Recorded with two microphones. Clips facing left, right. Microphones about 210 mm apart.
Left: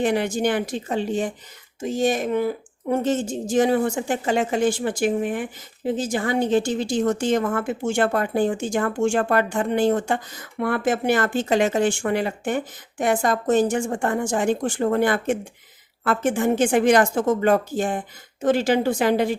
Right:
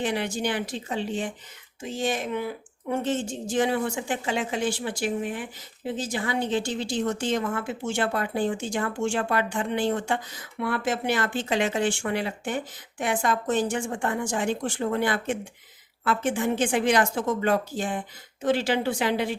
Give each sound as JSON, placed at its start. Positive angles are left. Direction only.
{"t": 0.0, "sound": "speech", "side_deg": 45}